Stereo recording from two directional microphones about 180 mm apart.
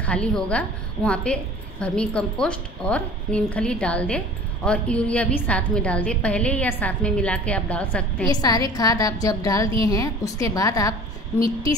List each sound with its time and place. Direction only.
0.0 s a woman's voice: 5° left (ahead or behind)
8.3 s a woman's voice: 20° left (ahead or behind)